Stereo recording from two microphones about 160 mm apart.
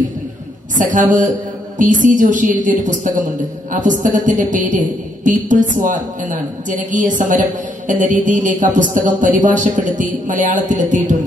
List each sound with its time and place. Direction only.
0.7 s a woman's voice: 55° right (ahead or behind)